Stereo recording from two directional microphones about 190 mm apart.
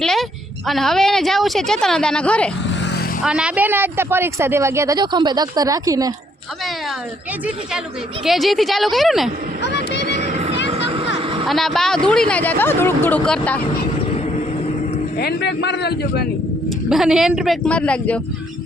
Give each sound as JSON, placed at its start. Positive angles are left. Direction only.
{"t": 0.0, "sound": "speech", "side_deg": 0}
{"t": 2.6, "sound": "vehicle", "side_deg": 70}
{"t": 3.2, "sound": "a woman's voice", "side_deg": -5}
{"t": 8.2, "sound": "speech", "side_deg": 0}
{"t": 10.0, "sound": "vehicle", "side_deg": -45}
{"t": 10.7, "sound": "a sound", "side_deg": -30}
{"t": 11.4, "sound": "speech", "side_deg": 0}
{"t": 15.2, "sound": "a man's voice", "side_deg": 60}
{"t": 16.9, "sound": "speech", "side_deg": 0}